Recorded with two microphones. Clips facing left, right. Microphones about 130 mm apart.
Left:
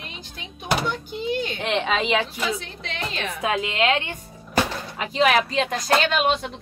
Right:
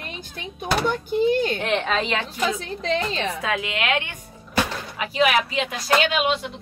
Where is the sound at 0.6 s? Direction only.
50° right (ahead or behind).